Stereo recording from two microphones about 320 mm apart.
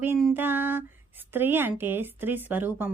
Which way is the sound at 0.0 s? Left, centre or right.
Centre.